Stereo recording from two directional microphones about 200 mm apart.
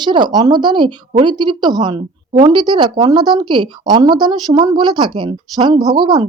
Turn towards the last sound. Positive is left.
turn(degrees=-20)  # may be behind; listen again after turning